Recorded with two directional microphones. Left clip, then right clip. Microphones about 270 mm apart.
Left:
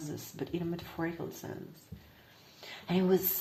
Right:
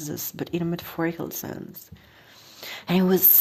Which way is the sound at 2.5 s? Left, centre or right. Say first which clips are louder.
Right 8 dB; right.